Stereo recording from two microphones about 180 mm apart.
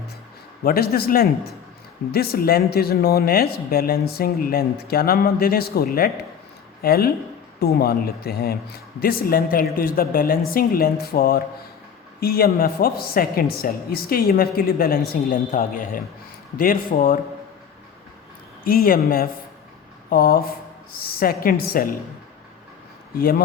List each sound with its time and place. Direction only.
0.6 s speech: 55° left (ahead or behind)
18.6 s speech: 50° left (ahead or behind)